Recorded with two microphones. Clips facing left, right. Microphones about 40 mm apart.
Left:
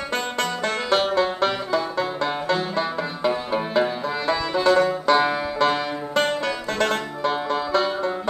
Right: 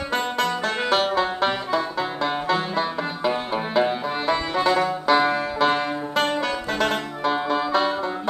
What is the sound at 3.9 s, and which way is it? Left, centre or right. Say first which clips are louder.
Music: right 1 dB; right.